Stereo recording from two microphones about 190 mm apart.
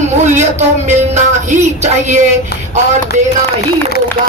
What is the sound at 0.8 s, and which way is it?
Speech, 40° right (ahead or behind).